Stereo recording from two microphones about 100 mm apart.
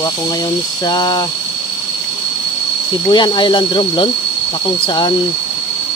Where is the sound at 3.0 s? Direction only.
50° left (ahead or behind).